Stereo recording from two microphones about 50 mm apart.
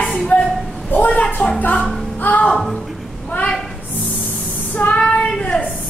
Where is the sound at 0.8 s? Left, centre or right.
Left.